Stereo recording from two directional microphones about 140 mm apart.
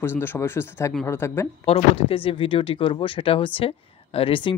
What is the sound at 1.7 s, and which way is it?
Speech, 40° left (ahead or behind).